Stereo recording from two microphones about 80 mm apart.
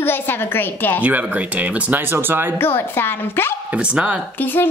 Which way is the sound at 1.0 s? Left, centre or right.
Centre.